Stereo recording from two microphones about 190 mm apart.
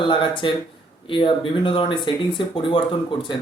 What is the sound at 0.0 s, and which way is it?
Speech, 25° left (ahead or behind).